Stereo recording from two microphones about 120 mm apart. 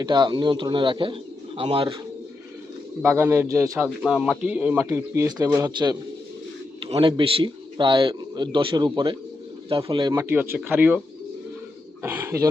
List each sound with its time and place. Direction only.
0.0 s a man's voice: 40° right (ahead or behind)
3.0 s speech: 20° right (ahead or behind)
3.8 s speech: 5° right (ahead or behind); by 6.0 s 35° right (ahead or behind)
6.7 s a man's voice: 45° right (ahead or behind)
10.2 s speech: 20° right (ahead or behind)
12.0 s speech: 20° right (ahead or behind)